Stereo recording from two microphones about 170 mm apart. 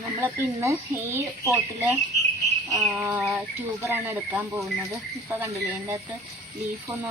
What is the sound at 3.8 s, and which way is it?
Speech, 15° right (ahead or behind).